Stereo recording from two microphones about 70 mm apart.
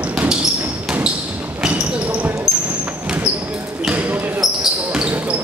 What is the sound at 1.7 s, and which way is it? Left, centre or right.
Basketball bounce, centre.